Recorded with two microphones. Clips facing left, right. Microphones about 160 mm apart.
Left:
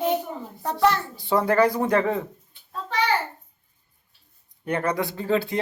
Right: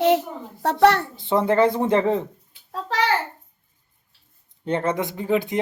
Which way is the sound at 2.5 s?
90° right.